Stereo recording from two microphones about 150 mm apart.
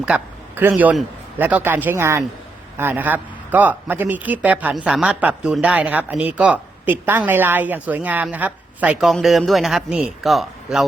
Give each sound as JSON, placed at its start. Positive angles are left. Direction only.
{"t": 0.0, "sound": "a man's voice", "side_deg": -10}